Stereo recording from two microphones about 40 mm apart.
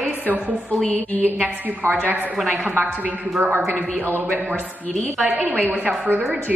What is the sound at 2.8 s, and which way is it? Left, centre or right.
Speech, right.